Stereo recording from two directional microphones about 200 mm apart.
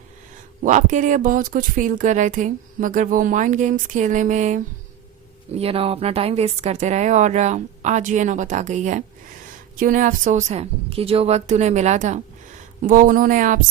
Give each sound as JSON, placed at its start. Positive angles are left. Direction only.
{"t": 0.6, "sound": "speech", "side_deg": -40}